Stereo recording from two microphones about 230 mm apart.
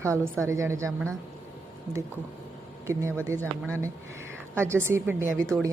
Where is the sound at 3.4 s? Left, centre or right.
Centre.